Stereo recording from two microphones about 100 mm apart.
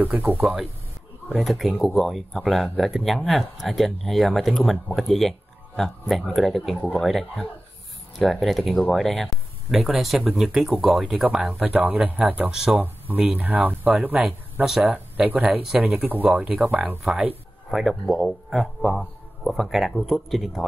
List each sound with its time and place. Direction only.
0.0 s speech: 15° right (ahead or behind)
1.4 s speech: centre (ahead or behind)
12.8 s speech: 20° right (ahead or behind)
17.6 s speech: centre (ahead or behind)